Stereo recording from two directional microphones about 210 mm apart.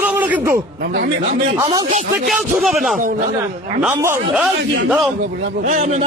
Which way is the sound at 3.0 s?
40° right (ahead or behind).